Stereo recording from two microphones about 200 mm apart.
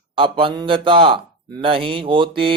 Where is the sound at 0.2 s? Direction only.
25° right (ahead or behind).